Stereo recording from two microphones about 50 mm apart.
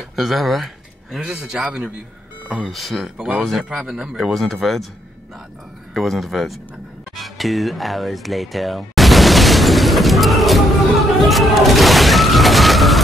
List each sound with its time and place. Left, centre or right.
0.1 s speech: centre
1.3 s a man's voice: centre
2.4 s speech: centre
4.3 s speech: centre
5.9 s speech: centre
7.2 s a sound: centre